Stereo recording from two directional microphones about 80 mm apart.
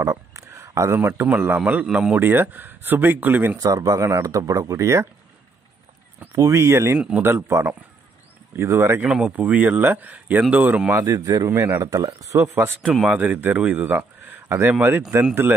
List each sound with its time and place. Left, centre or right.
0.0 s speech: right
1.9 s speech: centre
2.1 s speech: right
3.5 s speech: right
6.3 s a man's voice: right
9.0 s speech: centre
10.9 s a man's voice: right
11.1 s a man's voice: right
11.4 s a man's voice: right
13.1 s speech: centre